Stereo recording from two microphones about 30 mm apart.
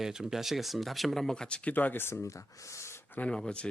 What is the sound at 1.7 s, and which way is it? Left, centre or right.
Speech, left.